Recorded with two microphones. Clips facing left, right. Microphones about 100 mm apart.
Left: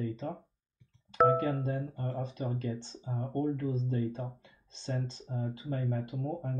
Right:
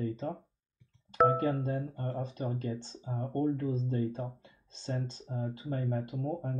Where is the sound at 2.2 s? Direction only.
40° right (ahead or behind).